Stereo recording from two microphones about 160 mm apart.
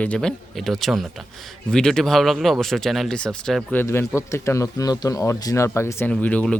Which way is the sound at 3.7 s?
15° left (ahead or behind).